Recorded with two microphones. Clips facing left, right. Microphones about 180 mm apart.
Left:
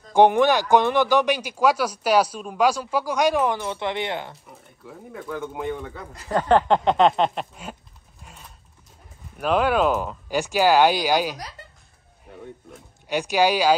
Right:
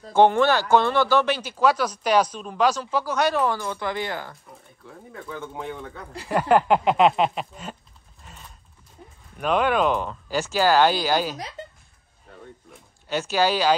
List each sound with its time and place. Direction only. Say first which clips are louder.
0.1 s speech: left 1 dB; 15° left (ahead or behind)
4.5 s speech: left 2 dB; 5° left (ahead or behind)
6.2 s speech: even; 10° right (ahead or behind)
8.2 s computer keyboard: even; 5° left (ahead or behind)
9.4 s speech: left 1 dB; 5° left (ahead or behind)
12.3 s a sound: left 4 dB; 15° left (ahead or behind)
13.0 s speech: left 2 dB; 15° left (ahead or behind)